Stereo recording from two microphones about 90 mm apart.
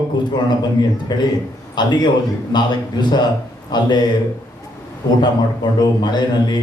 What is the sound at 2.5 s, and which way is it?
Speech, 55° left (ahead or behind).